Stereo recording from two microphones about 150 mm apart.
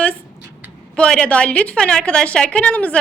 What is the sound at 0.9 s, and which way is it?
A woman's voice, 5° left (ahead or behind).